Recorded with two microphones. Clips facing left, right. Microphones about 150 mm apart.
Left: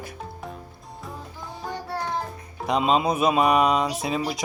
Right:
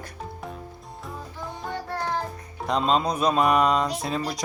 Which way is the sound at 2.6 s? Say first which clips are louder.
Left 1 dB; 5° left (ahead or behind).